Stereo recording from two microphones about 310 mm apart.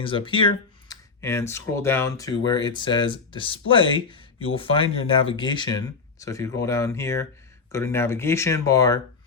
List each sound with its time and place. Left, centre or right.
0.0 s speech: centre